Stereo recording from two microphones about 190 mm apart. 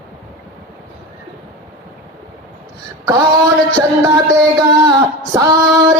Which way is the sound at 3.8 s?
20° right (ahead or behind).